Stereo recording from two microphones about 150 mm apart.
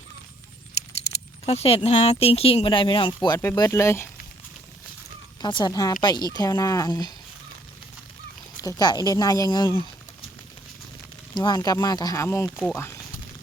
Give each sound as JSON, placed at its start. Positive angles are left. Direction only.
{"t": 1.5, "sound": "speech", "side_deg": 40}
{"t": 5.4, "sound": "speech", "side_deg": 30}
{"t": 8.5, "sound": "speech", "side_deg": 25}
{"t": 11.3, "sound": "speech", "side_deg": 25}